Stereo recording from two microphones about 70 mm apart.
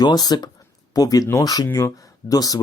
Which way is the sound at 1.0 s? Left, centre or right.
Left.